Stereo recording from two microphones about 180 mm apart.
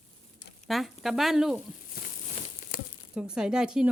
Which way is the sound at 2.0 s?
55° left (ahead or behind).